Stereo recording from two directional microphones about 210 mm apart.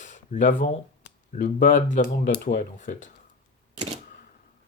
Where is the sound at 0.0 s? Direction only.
35° left (ahead or behind).